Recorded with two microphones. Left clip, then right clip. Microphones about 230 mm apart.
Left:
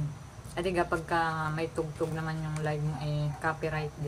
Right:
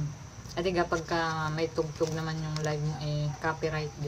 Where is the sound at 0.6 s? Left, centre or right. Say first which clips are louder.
Right 1 dB; centre.